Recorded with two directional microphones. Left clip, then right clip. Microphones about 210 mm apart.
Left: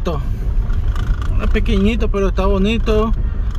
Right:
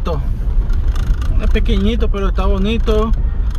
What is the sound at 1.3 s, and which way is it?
Speech, 20° left (ahead or behind).